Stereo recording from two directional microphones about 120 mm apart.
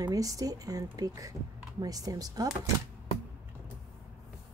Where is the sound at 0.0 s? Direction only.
30° right (ahead or behind).